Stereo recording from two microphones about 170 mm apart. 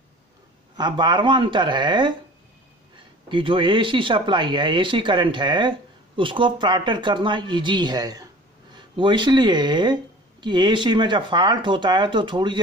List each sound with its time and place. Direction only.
0.7 s speech: 25° right (ahead or behind)
3.3 s speech: 30° right (ahead or behind)